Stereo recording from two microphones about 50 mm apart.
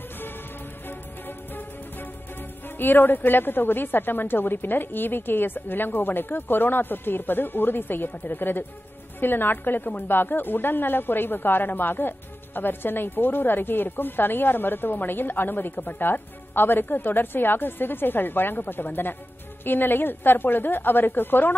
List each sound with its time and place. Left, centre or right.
0.8 s music: left
2.8 s a woman's voice: left